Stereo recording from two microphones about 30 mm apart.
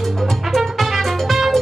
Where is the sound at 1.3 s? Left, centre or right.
Centre.